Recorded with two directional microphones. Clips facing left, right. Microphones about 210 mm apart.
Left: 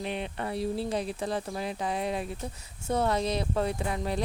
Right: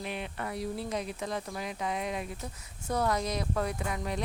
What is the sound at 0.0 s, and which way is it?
Speech, 30° left (ahead or behind).